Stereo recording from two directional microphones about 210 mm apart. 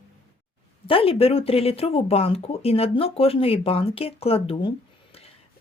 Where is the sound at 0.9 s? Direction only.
25° left (ahead or behind).